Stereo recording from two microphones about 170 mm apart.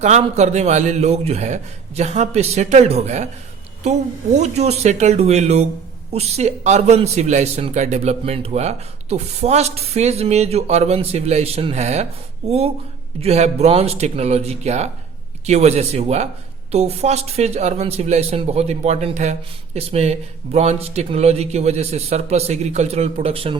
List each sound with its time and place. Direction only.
0.0 s a man's voice: 45° right (ahead or behind)
4.4 s a man's voice: 40° right (ahead or behind)